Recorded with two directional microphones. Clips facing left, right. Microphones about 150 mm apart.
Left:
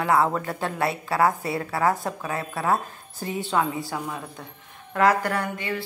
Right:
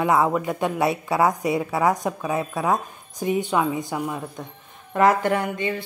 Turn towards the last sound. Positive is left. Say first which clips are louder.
# right 4 dB
turn(degrees=-20)  # may be behind; listen again after turning